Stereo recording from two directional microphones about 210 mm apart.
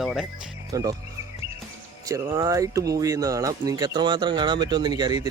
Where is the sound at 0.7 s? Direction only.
15° right (ahead or behind).